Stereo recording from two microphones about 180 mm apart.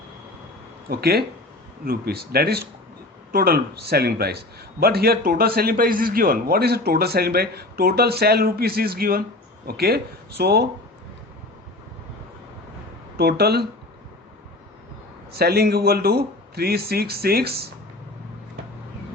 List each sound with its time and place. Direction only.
0.9 s a man's voice: 60° right (ahead or behind)
13.1 s a man's voice: 60° right (ahead or behind)
15.3 s a man's voice: 60° right (ahead or behind)